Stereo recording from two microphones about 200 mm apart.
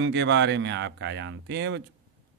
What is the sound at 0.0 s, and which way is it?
Speech, 60° right (ahead or behind).